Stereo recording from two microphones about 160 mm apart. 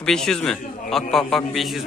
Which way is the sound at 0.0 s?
5° left (ahead or behind).